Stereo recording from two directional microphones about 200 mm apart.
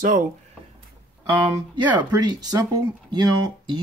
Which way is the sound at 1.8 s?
10° right (ahead or behind).